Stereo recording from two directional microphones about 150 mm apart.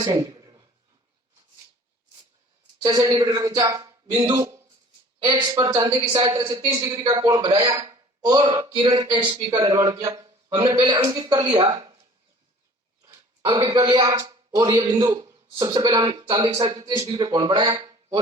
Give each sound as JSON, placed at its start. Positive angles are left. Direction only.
{"t": 0.0, "sound": "a sound", "side_deg": -25}
{"t": 2.8, "sound": "speech", "side_deg": -25}
{"t": 13.0, "sound": "dog", "side_deg": -20}
{"t": 13.4, "sound": "a man's voice", "side_deg": -35}